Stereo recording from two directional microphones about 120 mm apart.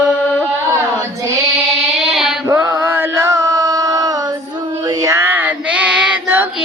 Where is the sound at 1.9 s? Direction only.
Centre (ahead or behind).